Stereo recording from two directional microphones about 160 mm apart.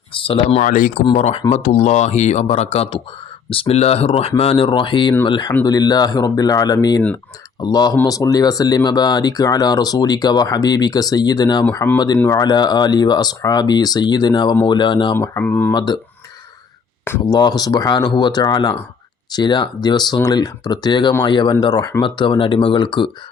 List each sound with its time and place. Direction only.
0.1 s a sound: 35° left (ahead or behind)
0.6 s speech: 55° left (ahead or behind)
1.1 s speech: 45° left (ahead or behind)
15.1 s speech: 15° left (ahead or behind)
15.7 s speech: 25° left (ahead or behind)
17.1 s speech: 20° left (ahead or behind)